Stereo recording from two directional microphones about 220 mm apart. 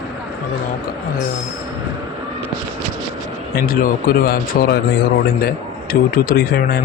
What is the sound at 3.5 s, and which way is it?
A man's voice, 40° left (ahead or behind).